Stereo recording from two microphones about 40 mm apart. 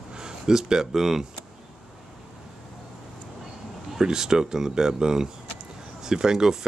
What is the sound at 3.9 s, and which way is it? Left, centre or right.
Speech, centre.